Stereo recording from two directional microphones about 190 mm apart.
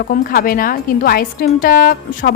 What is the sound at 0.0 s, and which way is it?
A woman's voice, 50° left (ahead or behind).